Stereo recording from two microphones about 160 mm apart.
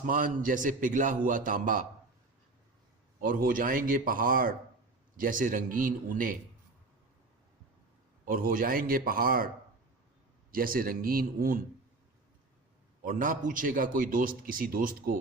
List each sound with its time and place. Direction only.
0.0 s a man's voice: 55° right (ahead or behind)
3.2 s a man's voice: 60° right (ahead or behind)
8.2 s a man's voice: 60° right (ahead or behind)
10.5 s a man's voice: 65° right (ahead or behind)
13.1 s a man's voice: 55° right (ahead or behind)